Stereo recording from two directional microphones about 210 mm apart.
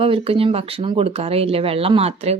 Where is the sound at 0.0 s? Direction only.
25° right (ahead or behind).